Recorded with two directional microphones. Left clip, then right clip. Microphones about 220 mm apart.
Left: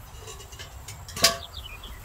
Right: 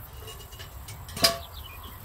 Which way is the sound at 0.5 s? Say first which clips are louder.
Left 2 dB; 20° left (ahead or behind).